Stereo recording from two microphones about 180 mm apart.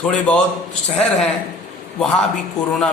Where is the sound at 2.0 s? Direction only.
5° left (ahead or behind).